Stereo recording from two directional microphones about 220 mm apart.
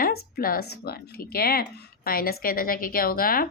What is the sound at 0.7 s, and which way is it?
A woman's voice, 45° left (ahead or behind).